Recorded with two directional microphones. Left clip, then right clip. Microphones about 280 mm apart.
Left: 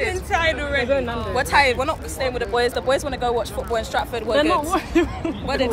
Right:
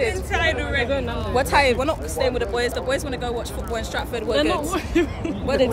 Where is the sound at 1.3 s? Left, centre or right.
Centre.